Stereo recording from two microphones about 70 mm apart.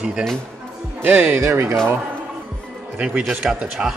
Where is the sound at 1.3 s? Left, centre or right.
Right.